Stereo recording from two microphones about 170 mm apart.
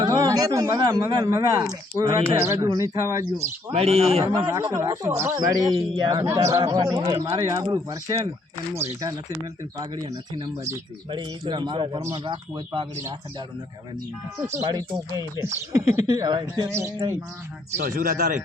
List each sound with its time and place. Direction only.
0.1 s a man's voice: 20° right (ahead or behind)
3.3 s speech: 40° right (ahead or behind)
4.3 s speech: 20° right (ahead or behind)
14.3 s speech: 15° right (ahead or behind)
17.8 s speech: 60° right (ahead or behind)